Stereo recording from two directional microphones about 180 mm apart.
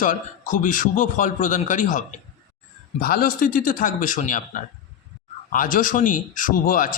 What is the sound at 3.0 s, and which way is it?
A man's voice, 55° left (ahead or behind).